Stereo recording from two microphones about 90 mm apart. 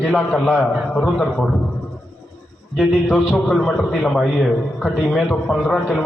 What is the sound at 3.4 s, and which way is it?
A man's voice, 10° left (ahead or behind).